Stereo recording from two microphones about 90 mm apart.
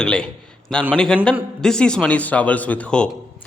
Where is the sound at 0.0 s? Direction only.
10° left (ahead or behind).